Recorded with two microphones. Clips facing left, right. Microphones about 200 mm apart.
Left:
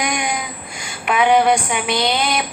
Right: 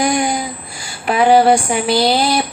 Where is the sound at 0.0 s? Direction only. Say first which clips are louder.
Right 6 dB; 30° right (ahead or behind).